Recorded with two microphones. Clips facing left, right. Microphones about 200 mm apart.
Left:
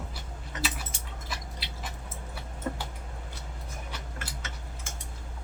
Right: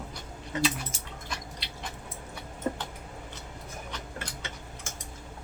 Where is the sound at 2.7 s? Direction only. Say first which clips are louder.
Right 3 dB; 20° right (ahead or behind).